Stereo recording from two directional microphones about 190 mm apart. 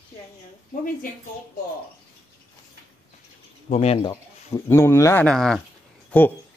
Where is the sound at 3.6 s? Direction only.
35° left (ahead or behind).